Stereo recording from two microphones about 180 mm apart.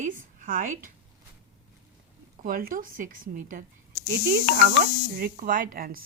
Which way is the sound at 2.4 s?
50° right (ahead or behind).